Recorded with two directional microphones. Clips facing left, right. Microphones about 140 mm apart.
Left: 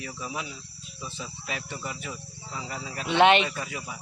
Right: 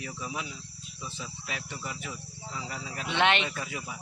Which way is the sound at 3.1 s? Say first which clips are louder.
Left 7 dB; 15° left (ahead or behind).